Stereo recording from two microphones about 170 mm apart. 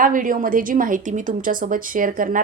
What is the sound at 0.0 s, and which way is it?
A woman's voice, 50° right (ahead or behind).